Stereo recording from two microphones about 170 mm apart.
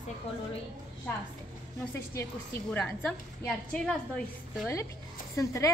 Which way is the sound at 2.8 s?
5° left (ahead or behind).